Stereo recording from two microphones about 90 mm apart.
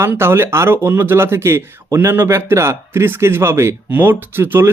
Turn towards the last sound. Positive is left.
turn(degrees=-25)  # may be behind; listen again after turning